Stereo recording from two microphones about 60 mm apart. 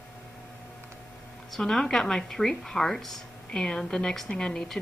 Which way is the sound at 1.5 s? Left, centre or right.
Centre.